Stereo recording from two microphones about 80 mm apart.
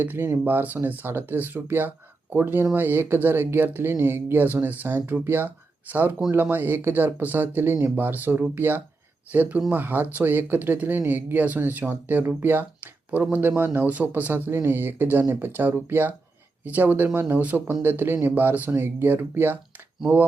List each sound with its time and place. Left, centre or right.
0.0 s speech: right